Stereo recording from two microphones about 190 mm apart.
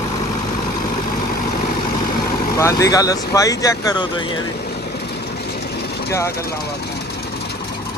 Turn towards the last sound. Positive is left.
turn(degrees=15)  # may be behind; listen again after turning